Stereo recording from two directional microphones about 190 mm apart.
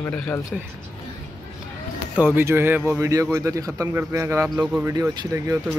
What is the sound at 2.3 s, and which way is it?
A man's voice, 10° right (ahead or behind).